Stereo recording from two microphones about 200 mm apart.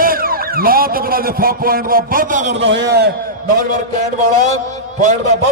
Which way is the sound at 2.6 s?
60° right (ahead or behind).